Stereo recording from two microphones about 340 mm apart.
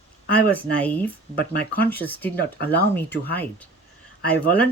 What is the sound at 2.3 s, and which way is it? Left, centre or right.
Speech, left.